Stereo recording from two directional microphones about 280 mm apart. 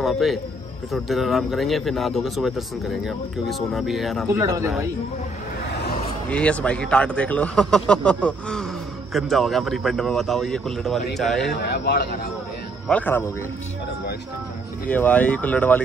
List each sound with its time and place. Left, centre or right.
0.0 s speech: centre
4.4 s speech: centre
5.7 s a sound: left
6.2 s speech: centre
11.5 s a man's voice: left
12.8 s speech: centre
14.9 s speech: centre